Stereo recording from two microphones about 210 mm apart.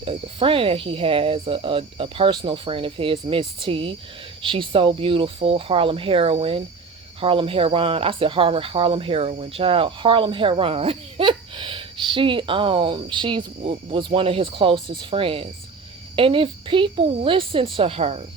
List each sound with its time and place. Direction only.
0.0 s speech: 25° right (ahead or behind)